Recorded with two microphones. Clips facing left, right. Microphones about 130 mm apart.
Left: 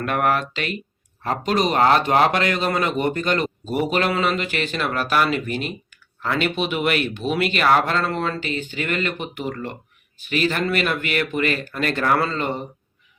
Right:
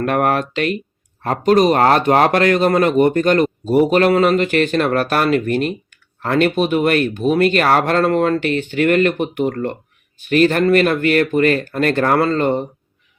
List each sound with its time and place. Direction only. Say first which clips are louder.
0.0 s speech: right 4 dB; 45° right (ahead or behind)